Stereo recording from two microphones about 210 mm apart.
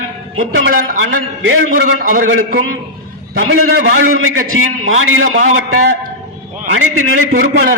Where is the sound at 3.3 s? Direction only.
70° right (ahead or behind).